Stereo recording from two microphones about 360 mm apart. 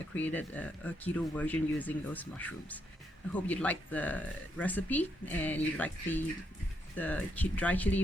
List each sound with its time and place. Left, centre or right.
0.1 s speech: centre